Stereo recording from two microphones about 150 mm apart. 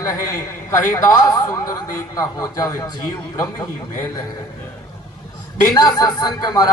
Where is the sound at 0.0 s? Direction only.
20° left (ahead or behind).